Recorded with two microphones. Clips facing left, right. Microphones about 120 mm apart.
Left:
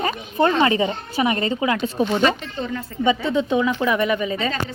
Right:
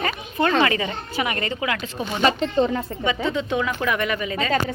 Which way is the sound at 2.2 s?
35° right (ahead or behind).